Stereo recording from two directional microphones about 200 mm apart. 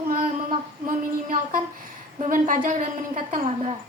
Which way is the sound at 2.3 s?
40° right (ahead or behind).